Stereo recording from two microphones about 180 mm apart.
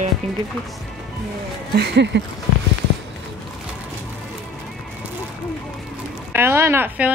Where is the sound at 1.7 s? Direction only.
70° right (ahead or behind).